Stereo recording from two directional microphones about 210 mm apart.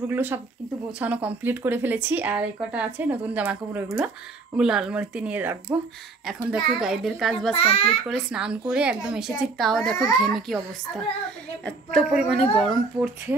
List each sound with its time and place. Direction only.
0.1 s speech: 10° right (ahead or behind)
7.5 s a child's voice: 30° left (ahead or behind)
8.1 s speech: 5° right (ahead or behind)
11.6 s speech: centre (ahead or behind)